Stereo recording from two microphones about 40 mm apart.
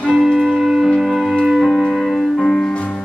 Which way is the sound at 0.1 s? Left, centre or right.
Centre.